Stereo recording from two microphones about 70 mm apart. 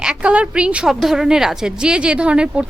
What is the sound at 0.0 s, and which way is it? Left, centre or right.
Speech, centre.